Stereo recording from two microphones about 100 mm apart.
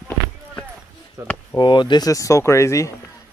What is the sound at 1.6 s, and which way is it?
Speech, 50° left (ahead or behind).